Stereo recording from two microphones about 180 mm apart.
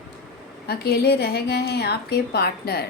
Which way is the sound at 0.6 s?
60° left (ahead or behind).